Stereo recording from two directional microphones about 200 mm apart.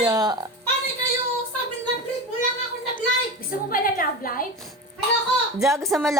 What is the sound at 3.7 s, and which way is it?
Speech, 45° left (ahead or behind).